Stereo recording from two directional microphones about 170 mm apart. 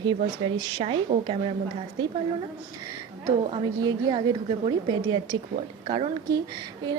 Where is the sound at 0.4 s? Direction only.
30° right (ahead or behind).